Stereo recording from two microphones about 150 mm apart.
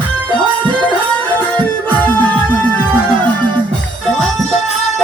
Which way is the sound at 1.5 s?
10° left (ahead or behind).